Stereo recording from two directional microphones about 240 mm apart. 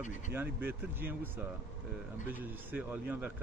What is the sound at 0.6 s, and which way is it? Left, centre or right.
A man's voice, centre.